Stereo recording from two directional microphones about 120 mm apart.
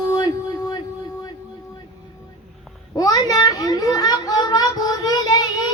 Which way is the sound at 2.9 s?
35° left (ahead or behind).